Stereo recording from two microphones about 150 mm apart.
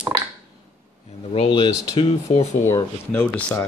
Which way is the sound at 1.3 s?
35° left (ahead or behind).